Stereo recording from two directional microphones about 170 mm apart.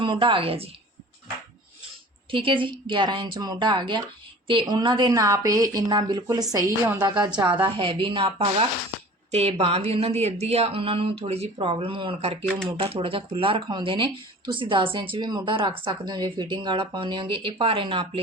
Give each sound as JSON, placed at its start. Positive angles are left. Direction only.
{"t": 0.0, "sound": "speech", "side_deg": -30}
{"t": 2.3, "sound": "a woman's voice", "side_deg": -30}
{"t": 7.6, "sound": "a woman's voice", "side_deg": -30}